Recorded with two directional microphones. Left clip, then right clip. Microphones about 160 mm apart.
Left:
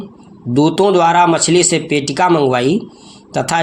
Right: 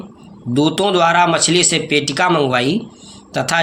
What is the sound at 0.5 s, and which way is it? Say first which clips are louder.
Speech: left 3 dB; 40° left (ahead or behind).